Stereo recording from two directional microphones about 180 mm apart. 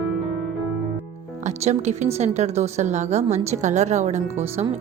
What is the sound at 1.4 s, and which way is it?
Speech, 40° right (ahead or behind).